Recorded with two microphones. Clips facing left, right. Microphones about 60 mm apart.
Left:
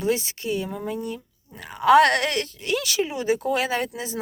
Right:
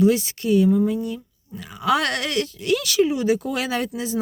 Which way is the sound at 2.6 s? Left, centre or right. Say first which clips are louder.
Right 6 dB; left.